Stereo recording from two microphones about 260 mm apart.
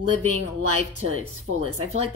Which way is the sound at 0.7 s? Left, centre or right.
Right.